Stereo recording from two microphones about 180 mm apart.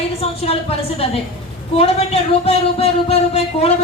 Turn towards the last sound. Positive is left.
turn(degrees=35)  # may be behind; listen again after turning